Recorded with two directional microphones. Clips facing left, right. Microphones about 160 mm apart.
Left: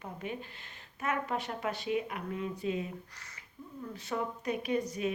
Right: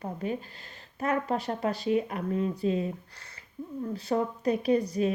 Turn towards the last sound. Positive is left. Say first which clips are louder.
# right 7 dB
turn(degrees=-35)  # may be behind; listen again after turning